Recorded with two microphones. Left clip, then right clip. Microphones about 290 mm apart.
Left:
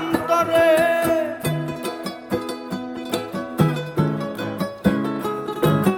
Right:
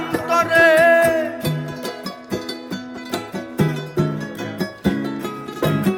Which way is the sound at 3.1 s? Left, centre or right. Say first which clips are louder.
Even; centre.